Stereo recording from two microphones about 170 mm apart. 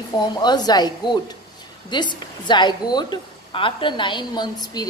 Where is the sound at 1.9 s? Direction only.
25° left (ahead or behind).